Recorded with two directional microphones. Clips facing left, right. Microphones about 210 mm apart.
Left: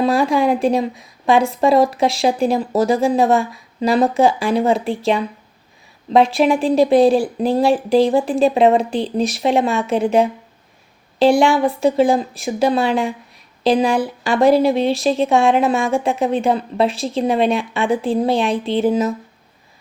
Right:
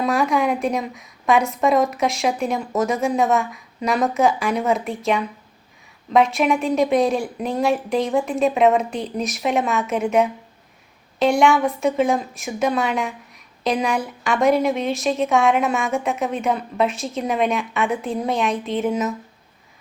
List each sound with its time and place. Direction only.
0.0 s a woman's voice: 30° left (ahead or behind)